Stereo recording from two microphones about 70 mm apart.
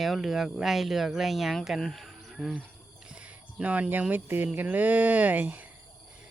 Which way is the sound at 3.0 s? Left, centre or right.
Centre.